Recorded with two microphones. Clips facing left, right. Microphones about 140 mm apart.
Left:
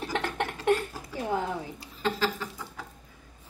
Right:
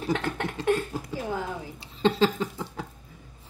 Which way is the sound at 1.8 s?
25° right (ahead or behind).